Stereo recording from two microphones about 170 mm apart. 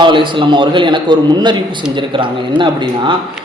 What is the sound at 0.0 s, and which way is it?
A man's voice, 30° right (ahead or behind).